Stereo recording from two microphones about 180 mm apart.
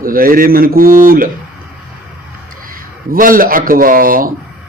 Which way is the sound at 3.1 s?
50° right (ahead or behind).